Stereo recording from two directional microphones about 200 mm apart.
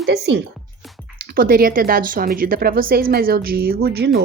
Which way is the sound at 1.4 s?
45° right (ahead or behind).